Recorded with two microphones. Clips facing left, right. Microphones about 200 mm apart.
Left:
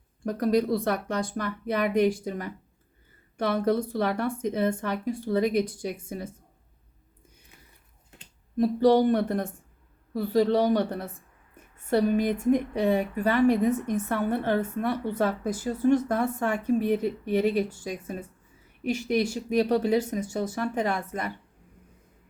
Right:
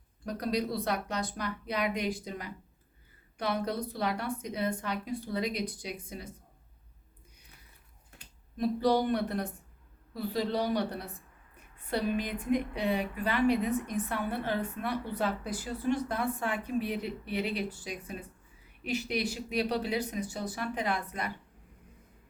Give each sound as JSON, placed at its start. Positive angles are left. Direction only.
{"t": 0.3, "sound": "speech", "side_deg": 50}
{"t": 3.3, "sound": "speech", "side_deg": 50}
{"t": 8.5, "sound": "speech", "side_deg": 45}
{"t": 11.9, "sound": "speech", "side_deg": 50}